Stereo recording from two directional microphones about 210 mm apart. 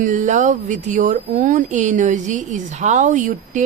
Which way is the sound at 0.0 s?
35° right (ahead or behind).